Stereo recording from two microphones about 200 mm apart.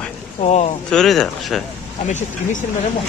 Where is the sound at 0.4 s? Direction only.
35° left (ahead or behind).